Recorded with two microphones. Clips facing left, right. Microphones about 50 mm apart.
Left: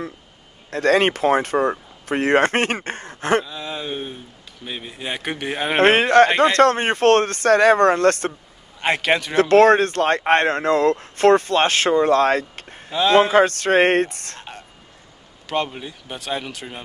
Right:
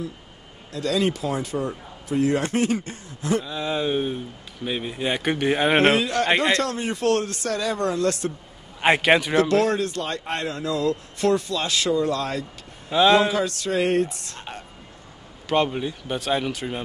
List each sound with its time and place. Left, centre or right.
0.7 s speech: left
3.4 s speech: centre
5.8 s speech: left
8.8 s a man's voice: centre
9.4 s speech: left
12.9 s speech: centre
13.2 s speech: left
15.4 s speech: centre